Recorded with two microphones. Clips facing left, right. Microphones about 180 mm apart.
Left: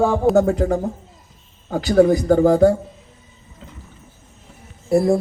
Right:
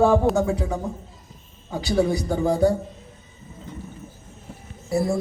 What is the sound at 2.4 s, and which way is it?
Speech, 90° left.